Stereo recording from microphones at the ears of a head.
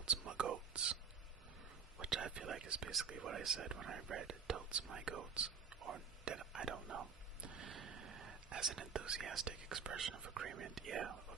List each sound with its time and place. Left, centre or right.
0.0 s whispering: right
2.0 s speech: right